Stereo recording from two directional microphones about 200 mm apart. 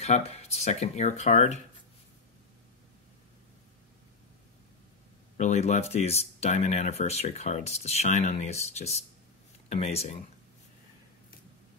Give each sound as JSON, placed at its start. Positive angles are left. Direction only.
{"t": 0.0, "sound": "speech", "side_deg": 30}
{"t": 5.4, "sound": "speech", "side_deg": 35}